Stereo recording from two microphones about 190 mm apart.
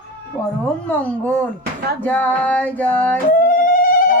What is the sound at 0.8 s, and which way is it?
Speech, 5° left (ahead or behind).